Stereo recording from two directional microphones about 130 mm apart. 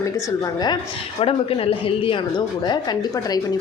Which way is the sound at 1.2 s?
45° left (ahead or behind).